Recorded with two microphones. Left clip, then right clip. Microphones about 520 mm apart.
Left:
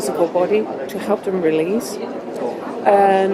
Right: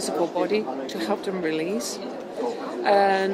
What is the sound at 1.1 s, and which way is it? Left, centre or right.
Speech, left.